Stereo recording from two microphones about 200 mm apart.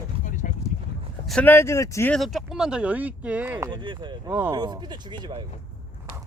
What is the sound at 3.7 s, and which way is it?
Speech, 25° right (ahead or behind).